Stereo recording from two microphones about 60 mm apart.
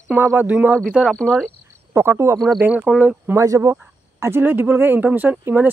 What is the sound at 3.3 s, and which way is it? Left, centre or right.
Speech, right.